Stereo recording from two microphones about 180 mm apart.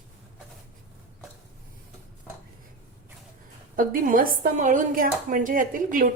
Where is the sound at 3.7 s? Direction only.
50° right (ahead or behind).